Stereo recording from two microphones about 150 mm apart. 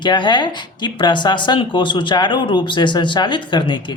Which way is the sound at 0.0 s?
30° left (ahead or behind).